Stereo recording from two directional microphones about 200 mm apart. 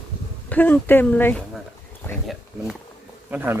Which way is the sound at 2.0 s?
10° left (ahead or behind).